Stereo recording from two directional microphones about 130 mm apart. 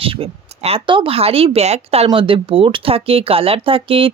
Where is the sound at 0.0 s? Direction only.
45° right (ahead or behind).